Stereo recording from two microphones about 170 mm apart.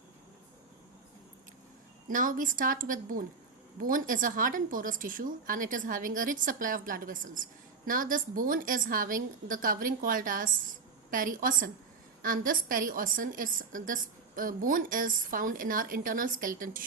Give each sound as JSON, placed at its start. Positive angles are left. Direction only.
{"t": 2.0, "sound": "a woman's voice", "side_deg": -50}